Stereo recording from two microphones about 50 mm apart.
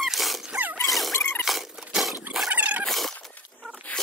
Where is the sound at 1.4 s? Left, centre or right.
Centre.